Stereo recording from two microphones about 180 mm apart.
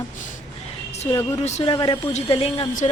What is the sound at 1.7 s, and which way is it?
Speech, 25° left (ahead or behind).